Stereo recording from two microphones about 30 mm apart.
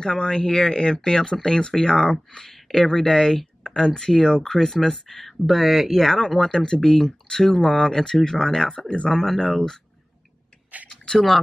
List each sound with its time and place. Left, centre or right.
0.0 s speech: left
2.3 s speech: centre
6.0 s speech: centre
9.1 s speech: centre